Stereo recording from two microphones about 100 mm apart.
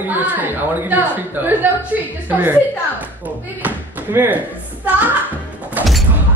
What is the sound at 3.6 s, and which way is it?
Speech, 20° right (ahead or behind).